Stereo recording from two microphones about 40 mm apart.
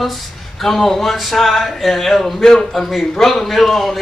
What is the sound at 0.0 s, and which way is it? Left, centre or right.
A man's voice, centre.